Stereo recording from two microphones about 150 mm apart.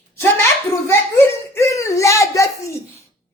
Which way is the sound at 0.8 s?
15° left (ahead or behind).